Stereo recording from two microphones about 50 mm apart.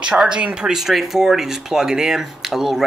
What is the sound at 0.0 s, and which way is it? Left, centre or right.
Speech, centre.